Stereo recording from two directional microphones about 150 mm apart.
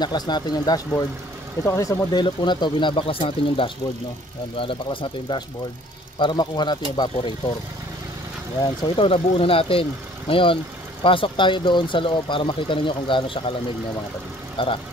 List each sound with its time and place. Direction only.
0.0 s speech: 30° left (ahead or behind)
8.5 s speech: 30° left (ahead or behind)
14.6 s speech: 35° left (ahead or behind)